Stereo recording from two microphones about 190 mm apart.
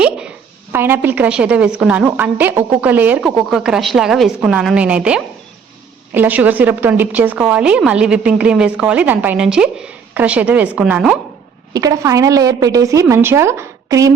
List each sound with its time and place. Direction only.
0.7 s a woman's voice: 10° right (ahead or behind)
11.7 s a woman's voice: 20° right (ahead or behind)